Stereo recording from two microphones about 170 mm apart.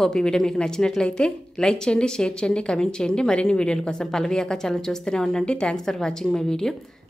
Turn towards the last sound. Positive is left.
turn(degrees=5)  # may be behind; listen again after turning